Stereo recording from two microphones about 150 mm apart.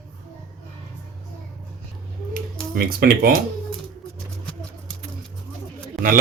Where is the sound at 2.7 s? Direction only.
90° right.